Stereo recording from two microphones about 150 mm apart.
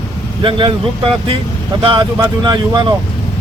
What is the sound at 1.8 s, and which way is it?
Speech, 30° right (ahead or behind).